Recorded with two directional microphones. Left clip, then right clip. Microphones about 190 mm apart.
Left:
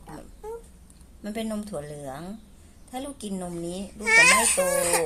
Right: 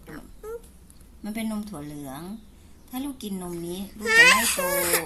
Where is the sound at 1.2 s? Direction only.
30° left (ahead or behind).